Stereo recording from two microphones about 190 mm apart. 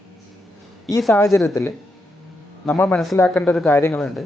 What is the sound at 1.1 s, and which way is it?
Speech, 15° left (ahead or behind).